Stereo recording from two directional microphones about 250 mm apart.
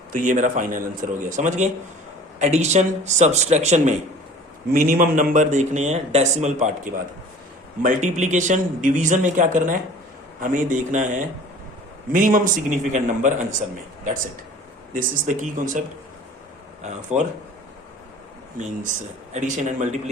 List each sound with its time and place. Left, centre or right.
0.1 s a man's voice: right
14.9 s a man's voice: right
16.8 s speech: right
19.3 s speech: right